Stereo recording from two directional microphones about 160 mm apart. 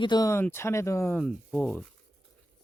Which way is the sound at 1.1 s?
5° left (ahead or behind).